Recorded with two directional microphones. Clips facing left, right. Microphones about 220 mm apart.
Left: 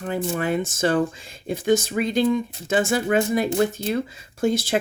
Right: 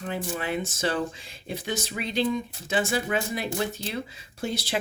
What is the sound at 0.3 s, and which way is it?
Speech, 50° left (ahead or behind).